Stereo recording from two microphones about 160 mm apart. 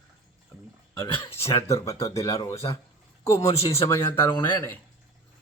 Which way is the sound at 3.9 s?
15° left (ahead or behind).